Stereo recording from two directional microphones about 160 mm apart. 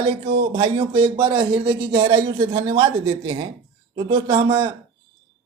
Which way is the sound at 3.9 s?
30° right (ahead or behind).